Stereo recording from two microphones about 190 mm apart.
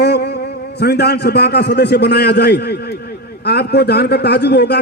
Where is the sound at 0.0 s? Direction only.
60° left (ahead or behind).